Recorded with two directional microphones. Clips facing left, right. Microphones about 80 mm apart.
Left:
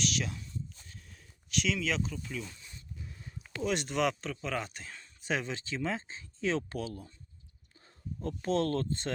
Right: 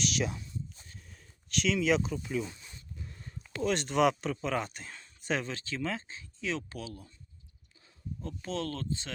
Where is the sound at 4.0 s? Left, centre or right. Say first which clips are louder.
Right 8 dB; centre.